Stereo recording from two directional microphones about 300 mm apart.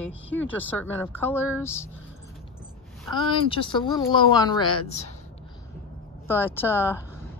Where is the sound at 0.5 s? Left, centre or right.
Centre.